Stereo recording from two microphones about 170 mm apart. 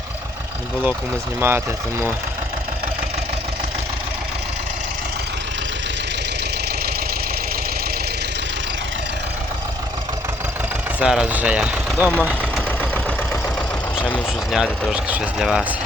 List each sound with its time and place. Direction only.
1.4 s speech: 15° right (ahead or behind)
11.0 s speech: 5° right (ahead or behind)
12.6 s engine: 5° left (ahead or behind)
14.5 s speech: 5° right (ahead or behind)